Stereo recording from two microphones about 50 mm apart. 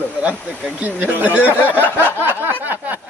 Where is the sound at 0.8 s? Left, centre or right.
Right.